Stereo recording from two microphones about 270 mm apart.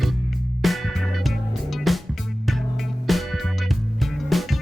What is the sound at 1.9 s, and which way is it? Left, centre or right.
Music, centre.